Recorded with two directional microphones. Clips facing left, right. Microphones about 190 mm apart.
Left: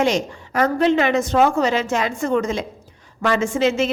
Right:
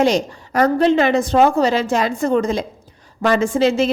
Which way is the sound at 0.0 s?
35° right (ahead or behind).